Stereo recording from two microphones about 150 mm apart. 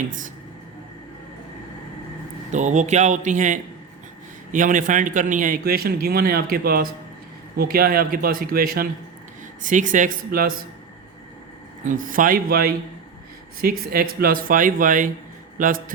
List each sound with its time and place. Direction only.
2.5 s a man's voice: 55° right (ahead or behind); by 8.9 s 80° right
9.6 s speech: 60° right (ahead or behind)
11.9 s speech: 65° right (ahead or behind); by 12.7 s 90° right
13.6 s a man's voice: 80° right; by 15.8 s 60° right (ahead or behind)